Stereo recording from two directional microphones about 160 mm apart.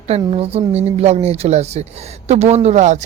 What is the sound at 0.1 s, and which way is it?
Speech, 40° right (ahead or behind).